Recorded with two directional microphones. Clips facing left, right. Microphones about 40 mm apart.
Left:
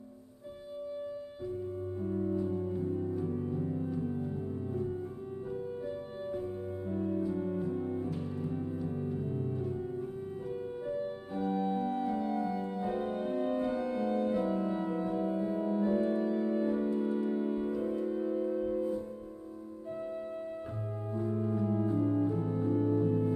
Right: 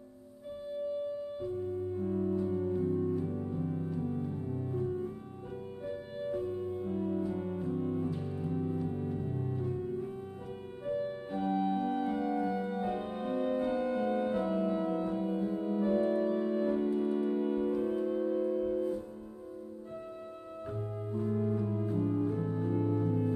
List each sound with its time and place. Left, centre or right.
11.3 s organ: right
13.1 s organ: centre
14.7 s music: centre
15.6 s organ: centre
20.6 s organ: centre
21.5 s music: centre